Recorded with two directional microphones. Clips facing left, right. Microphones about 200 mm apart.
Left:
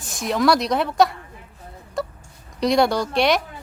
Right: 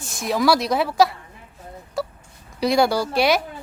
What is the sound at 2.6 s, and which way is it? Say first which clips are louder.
Speech: even; centre (ahead or behind).